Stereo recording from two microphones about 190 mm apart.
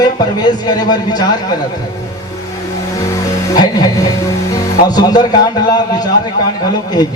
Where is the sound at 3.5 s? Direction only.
20° left (ahead or behind).